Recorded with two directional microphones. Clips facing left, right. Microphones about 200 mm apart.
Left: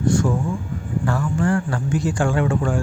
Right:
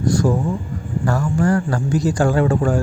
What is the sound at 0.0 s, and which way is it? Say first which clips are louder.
Speech: right 2 dB; 35° right (ahead or behind).